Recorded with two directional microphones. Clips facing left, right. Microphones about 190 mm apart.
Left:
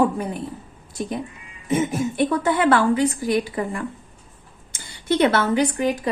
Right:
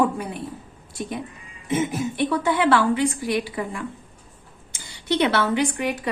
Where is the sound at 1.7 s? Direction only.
45° left (ahead or behind).